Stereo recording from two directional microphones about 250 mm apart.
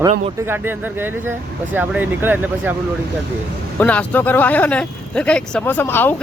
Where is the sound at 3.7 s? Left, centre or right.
Centre.